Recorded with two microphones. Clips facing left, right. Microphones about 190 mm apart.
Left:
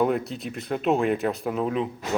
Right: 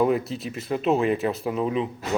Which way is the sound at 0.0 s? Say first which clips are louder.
Right 2 dB; centre (ahead or behind).